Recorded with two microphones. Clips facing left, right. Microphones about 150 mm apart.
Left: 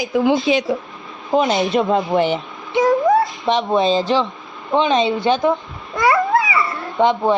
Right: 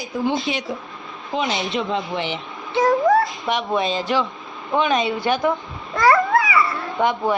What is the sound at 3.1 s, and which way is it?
Cat, 25° left (ahead or behind).